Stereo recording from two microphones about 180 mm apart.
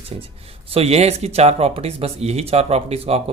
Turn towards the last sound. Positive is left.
turn(degrees=-35)  # may be behind; listen again after turning